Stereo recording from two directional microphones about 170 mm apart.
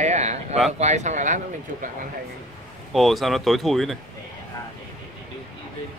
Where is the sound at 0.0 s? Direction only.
40° right (ahead or behind).